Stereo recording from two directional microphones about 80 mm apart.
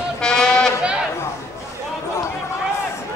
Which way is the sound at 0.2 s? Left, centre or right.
Centre.